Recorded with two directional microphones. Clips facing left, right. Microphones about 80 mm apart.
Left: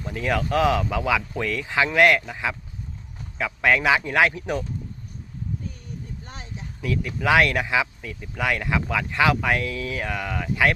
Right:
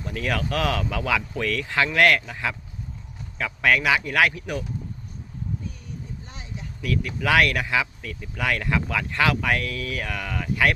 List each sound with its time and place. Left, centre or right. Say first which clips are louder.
0.0 s speech: left 2 dB; left
6.2 s vehicle: left 2 dB; left
6.8 s speech: left 1 dB; left